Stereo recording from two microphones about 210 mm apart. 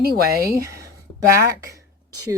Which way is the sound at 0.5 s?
15° right (ahead or behind).